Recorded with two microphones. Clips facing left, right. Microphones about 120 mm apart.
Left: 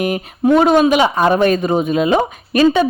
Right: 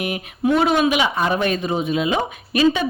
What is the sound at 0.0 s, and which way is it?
Speech, 40° left (ahead or behind).